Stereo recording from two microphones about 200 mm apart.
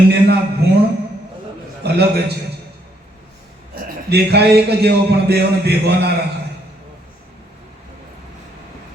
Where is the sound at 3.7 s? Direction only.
55° right (ahead or behind).